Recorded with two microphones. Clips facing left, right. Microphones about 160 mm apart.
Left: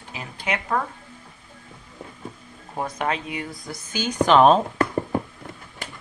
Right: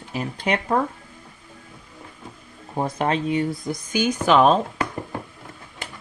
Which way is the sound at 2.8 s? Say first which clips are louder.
Right 4 dB; 30° right (ahead or behind).